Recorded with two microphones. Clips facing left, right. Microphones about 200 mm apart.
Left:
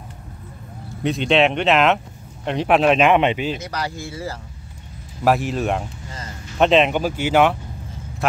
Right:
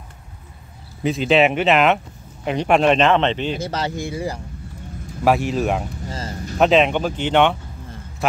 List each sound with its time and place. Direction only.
1.0 s a man's voice: centre (ahead or behind)
3.5 s speech: 25° right (ahead or behind)
5.2 s speech: centre (ahead or behind)
6.0 s a sound: 35° right (ahead or behind)
6.6 s speech: centre (ahead or behind)